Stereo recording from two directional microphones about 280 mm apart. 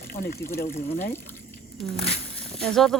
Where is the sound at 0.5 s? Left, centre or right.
Left.